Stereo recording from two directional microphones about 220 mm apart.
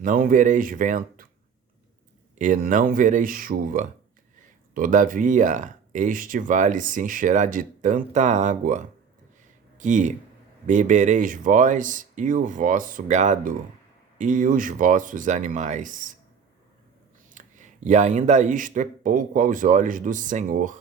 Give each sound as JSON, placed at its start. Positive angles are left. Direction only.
{"t": 0.0, "sound": "speech", "side_deg": -40}
{"t": 2.4, "sound": "speech", "side_deg": -35}
{"t": 17.4, "sound": "a sound", "side_deg": -35}
{"t": 17.8, "sound": "speech", "side_deg": -35}